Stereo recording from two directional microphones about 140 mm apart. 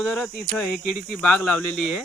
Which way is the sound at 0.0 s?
Centre (ahead or behind).